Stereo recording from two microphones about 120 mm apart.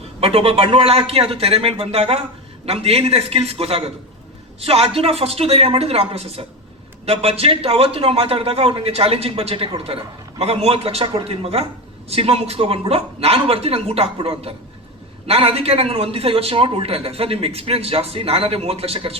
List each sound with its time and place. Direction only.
0.2 s a man's voice: 55° right (ahead or behind)